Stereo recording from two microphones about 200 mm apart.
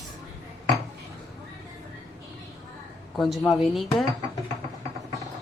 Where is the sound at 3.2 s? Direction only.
Centre (ahead or behind).